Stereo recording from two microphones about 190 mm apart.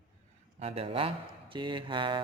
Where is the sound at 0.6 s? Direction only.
30° right (ahead or behind).